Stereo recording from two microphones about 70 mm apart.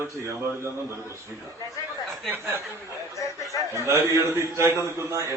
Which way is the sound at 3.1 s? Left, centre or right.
Left.